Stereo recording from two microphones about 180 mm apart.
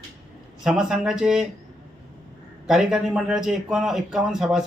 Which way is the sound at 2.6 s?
Centre (ahead or behind).